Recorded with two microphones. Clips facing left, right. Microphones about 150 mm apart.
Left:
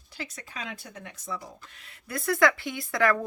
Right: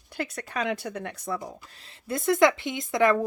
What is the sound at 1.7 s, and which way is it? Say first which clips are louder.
Speech: right 5 dB; 30° right (ahead or behind).